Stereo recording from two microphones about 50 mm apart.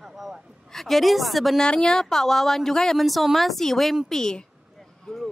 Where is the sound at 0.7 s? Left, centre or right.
Centre.